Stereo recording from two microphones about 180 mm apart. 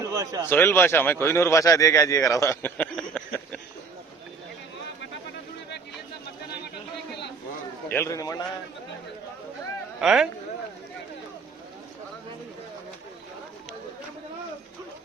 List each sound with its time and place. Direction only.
0.0 s a sound: 20° right (ahead or behind)
0.4 s speech: 10° left (ahead or behind)
7.9 s a man's voice: 15° left (ahead or behind)
10.0 s speech: centre (ahead or behind)